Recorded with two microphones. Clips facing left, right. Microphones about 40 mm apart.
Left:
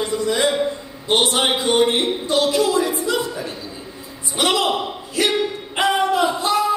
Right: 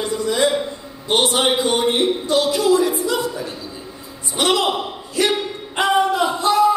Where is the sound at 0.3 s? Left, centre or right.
Centre.